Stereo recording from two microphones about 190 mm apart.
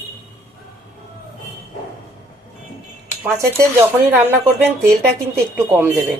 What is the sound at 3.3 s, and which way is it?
Speech, 15° right (ahead or behind).